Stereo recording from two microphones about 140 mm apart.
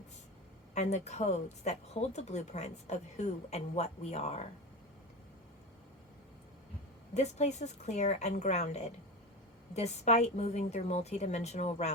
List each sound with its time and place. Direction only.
0.7 s speech: 55° left (ahead or behind)
7.1 s speech: 55° left (ahead or behind)